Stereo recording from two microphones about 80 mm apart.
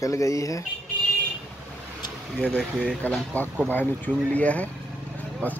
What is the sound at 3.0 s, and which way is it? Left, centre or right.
Speech, centre.